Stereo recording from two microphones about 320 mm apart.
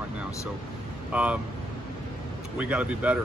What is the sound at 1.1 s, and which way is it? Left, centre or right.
Speech, centre.